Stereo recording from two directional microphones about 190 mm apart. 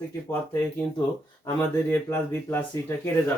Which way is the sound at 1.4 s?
10° left (ahead or behind).